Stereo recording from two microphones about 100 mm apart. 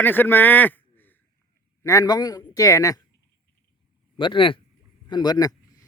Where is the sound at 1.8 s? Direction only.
30° left (ahead or behind).